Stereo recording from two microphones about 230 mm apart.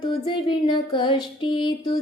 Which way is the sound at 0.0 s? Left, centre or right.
Centre.